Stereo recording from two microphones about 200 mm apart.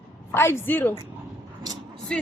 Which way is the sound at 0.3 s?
10° left (ahead or behind).